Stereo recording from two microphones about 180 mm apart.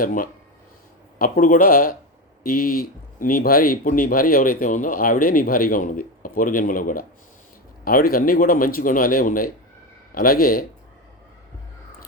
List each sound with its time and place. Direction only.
0.0 s speech: 50° left (ahead or behind)